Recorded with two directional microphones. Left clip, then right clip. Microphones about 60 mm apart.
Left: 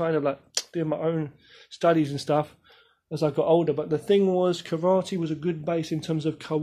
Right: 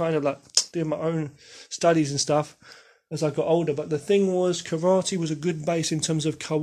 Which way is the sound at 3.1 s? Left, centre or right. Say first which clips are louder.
Left 1 dB; left.